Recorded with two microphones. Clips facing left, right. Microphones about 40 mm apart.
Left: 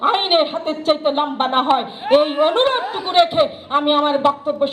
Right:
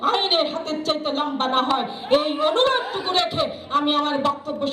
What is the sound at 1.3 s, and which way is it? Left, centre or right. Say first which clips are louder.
A woman's voice: left 4 dB; left.